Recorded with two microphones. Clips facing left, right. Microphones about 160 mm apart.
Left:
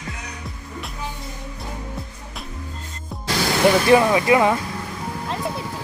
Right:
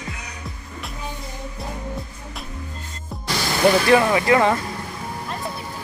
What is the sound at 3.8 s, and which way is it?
Speech, 20° left (ahead or behind).